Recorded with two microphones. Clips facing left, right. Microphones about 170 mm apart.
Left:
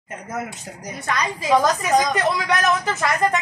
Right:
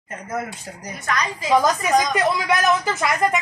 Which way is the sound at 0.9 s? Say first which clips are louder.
Even; 30° left (ahead or behind).